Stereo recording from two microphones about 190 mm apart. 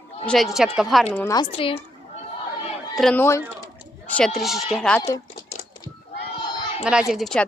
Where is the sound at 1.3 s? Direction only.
25° left (ahead or behind).